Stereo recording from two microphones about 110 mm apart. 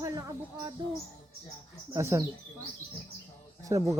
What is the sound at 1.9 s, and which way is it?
Speech, 25° right (ahead or behind).